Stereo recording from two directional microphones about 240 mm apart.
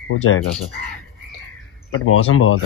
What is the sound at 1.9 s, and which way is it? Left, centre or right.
Speech, left.